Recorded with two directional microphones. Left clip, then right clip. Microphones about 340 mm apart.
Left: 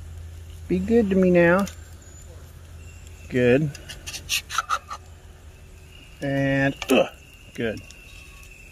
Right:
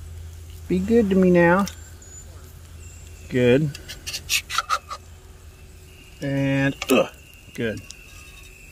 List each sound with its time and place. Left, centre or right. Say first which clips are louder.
0.7 s speech: right 1 dB; centre
3.3 s speech: right 1 dB; centre
3.7 s a sound: right 3 dB; centre
6.1 s speech: left 1 dB; centre